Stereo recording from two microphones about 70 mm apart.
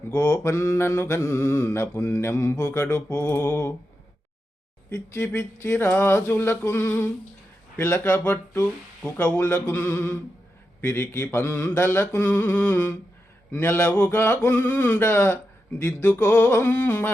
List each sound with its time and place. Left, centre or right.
0.1 s mantra: left
5.1 s speech: left
5.5 s mantra: left
7.8 s speech: left
10.8 s mantra: left